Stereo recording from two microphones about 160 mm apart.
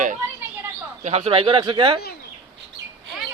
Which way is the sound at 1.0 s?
40° right (ahead or behind).